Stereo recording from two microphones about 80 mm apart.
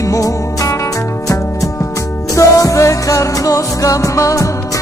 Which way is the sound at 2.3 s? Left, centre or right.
Left.